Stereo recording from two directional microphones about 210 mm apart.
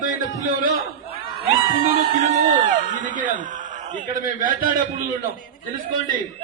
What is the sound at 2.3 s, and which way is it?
A man's voice, 35° right (ahead or behind).